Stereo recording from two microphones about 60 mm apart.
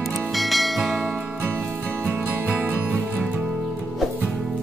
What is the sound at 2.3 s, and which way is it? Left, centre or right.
Music, right.